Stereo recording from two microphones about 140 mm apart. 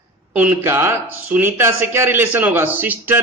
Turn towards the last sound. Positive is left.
turn(degrees=-15)  # may be behind; listen again after turning